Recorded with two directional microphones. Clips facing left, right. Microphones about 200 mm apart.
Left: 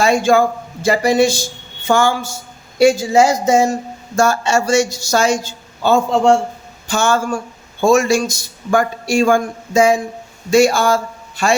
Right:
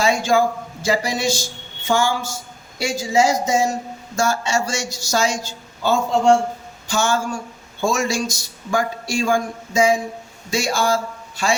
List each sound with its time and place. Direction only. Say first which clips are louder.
0.0 s a man's voice: left 4 dB; 55° left (ahead or behind)